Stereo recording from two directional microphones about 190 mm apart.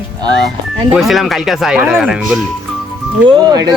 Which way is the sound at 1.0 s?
Centre (ahead or behind).